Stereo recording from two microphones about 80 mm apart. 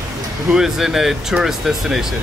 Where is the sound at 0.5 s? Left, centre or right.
Centre.